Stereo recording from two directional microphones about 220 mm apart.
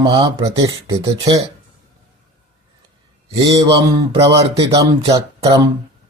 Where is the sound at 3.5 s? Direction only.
20° right (ahead or behind).